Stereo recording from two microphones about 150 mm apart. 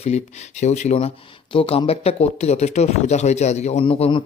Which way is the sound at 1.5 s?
40° left (ahead or behind).